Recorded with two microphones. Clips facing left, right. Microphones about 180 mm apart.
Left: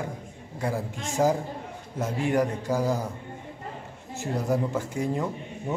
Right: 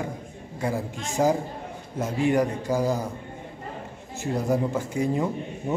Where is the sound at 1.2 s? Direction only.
5° right (ahead or behind).